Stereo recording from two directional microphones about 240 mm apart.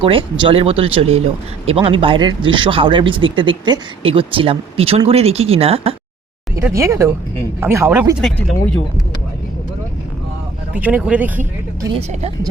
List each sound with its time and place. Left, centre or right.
0.0 s speech: right
6.6 s speech: centre
8.2 s speech: centre
10.8 s speech: centre